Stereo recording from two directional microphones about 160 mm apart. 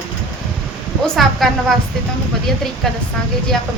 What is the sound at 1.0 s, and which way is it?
Speech, centre (ahead or behind).